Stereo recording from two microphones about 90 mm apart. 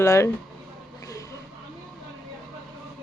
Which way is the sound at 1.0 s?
40° left (ahead or behind).